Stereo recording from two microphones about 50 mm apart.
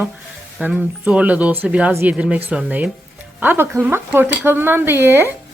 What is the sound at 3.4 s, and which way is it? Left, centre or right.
Speech, right.